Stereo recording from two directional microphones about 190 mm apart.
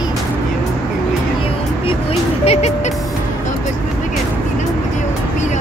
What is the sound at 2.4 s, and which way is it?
Music, 35° left (ahead or behind).